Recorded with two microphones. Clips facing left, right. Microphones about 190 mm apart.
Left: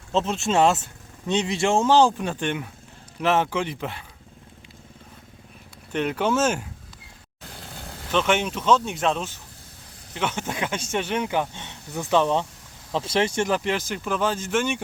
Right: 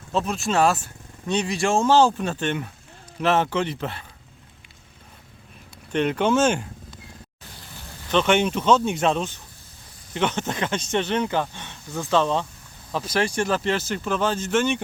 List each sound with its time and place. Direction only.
0.1 s speech: 25° left (ahead or behind)
5.9 s speech: 5° left (ahead or behind)
8.1 s speech: centre (ahead or behind)